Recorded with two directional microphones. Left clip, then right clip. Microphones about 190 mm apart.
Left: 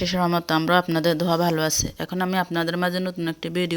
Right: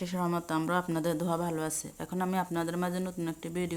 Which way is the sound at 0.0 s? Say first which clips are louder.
Left 10 dB; 30° left (ahead or behind).